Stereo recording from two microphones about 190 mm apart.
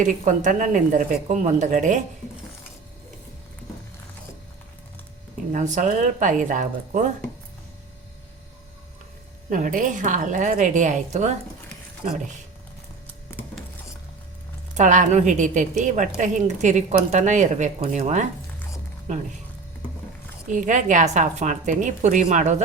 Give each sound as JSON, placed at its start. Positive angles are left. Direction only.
{"t": 0.0, "sound": "a woman's voice", "side_deg": -40}
{"t": 5.5, "sound": "a woman's voice", "side_deg": -40}
{"t": 9.5, "sound": "a woman's voice", "side_deg": -45}
{"t": 14.8, "sound": "a woman's voice", "side_deg": -40}
{"t": 20.5, "sound": "a woman's voice", "side_deg": -40}